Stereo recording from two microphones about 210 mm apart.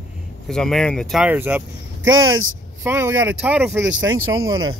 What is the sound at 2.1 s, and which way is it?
Speech, 75° right (ahead or behind).